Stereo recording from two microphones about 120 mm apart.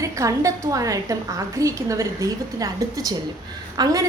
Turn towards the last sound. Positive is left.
turn(degrees=-35)  # may be behind; listen again after turning